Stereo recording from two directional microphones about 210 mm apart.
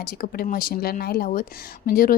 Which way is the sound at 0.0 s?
45° left (ahead or behind).